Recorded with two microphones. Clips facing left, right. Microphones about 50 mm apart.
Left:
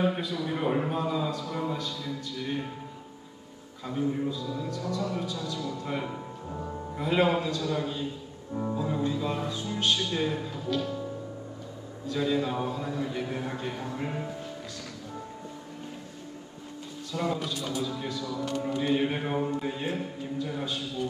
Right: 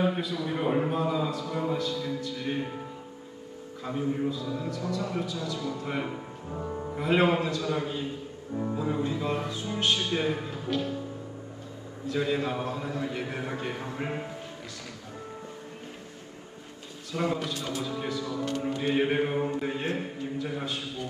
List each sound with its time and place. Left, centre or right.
0.0 s a man's voice: centre
3.8 s a man's voice: centre
12.1 s a man's voice: right
17.1 s a man's voice: right